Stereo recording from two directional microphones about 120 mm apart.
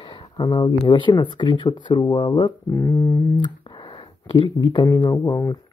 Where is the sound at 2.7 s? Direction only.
25° left (ahead or behind).